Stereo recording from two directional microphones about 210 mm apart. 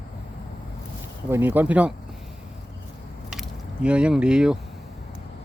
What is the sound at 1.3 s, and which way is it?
Speech, 10° right (ahead or behind).